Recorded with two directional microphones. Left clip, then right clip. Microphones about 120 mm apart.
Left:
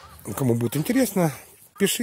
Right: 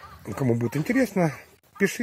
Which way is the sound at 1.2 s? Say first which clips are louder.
Left 1 dB; 40° left (ahead or behind).